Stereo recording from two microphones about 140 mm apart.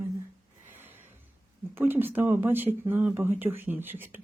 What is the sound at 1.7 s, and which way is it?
Speech, 15° right (ahead or behind).